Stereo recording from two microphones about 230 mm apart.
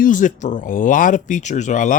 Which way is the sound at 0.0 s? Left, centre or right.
Left.